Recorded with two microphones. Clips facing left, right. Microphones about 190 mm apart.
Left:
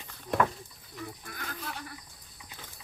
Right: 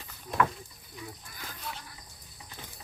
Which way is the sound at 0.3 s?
60° left (ahead or behind).